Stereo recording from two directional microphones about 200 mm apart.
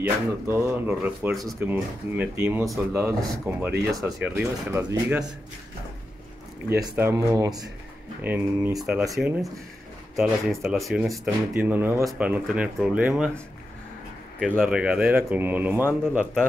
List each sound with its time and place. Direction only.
0.0 s speech: 10° right (ahead or behind)
6.8 s speech: 15° right (ahead or behind)
10.1 s speech: centre (ahead or behind)
14.4 s speech: centre (ahead or behind)